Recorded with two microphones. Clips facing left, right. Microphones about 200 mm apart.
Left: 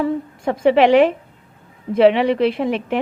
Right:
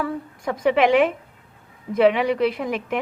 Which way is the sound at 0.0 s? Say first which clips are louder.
Left 6 dB; 25° left (ahead or behind).